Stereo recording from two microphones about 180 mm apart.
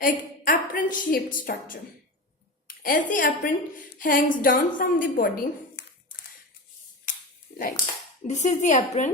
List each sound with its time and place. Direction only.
0.0 s a woman's voice: 50° left (ahead or behind)
7.1 s finger snapping: 45° left (ahead or behind)
7.5 s a sound: 45° left (ahead or behind)
8.3 s a woman's voice: 40° left (ahead or behind)